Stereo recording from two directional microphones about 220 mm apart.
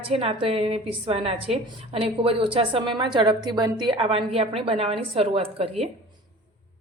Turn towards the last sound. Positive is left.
turn(degrees=-25)  # may be behind; listen again after turning